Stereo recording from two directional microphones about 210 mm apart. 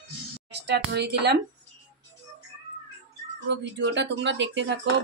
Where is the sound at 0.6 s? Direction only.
50° right (ahead or behind).